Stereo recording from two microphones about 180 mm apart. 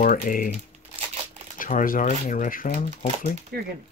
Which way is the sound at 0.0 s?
50° left (ahead or behind).